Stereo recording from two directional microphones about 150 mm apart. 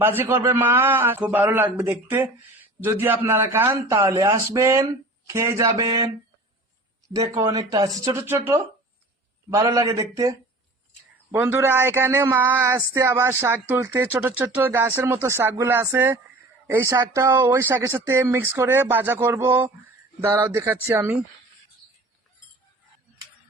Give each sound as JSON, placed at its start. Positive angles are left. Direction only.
{"t": 0.0, "sound": "a man's voice", "side_deg": -15}
{"t": 7.1, "sound": "a man's voice", "side_deg": -25}
{"t": 11.3, "sound": "speech", "side_deg": -10}